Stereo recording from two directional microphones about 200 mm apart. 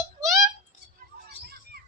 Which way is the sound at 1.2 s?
50° right (ahead or behind).